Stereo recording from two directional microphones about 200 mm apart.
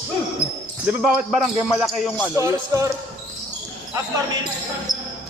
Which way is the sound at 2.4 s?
15° right (ahead or behind).